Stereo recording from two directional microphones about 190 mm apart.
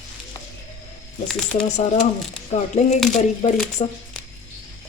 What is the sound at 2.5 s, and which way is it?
Speech, 35° left (ahead or behind).